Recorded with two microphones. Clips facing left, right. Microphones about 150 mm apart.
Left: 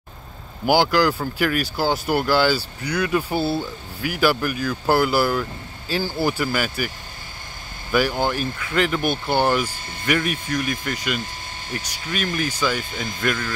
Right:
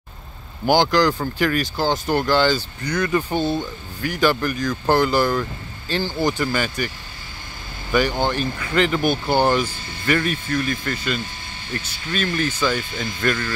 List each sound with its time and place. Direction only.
0.7 s speech: 5° left (ahead or behind)
7.9 s speech: 5° left (ahead or behind)